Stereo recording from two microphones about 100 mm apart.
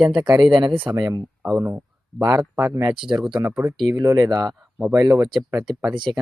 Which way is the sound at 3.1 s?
50° right (ahead or behind).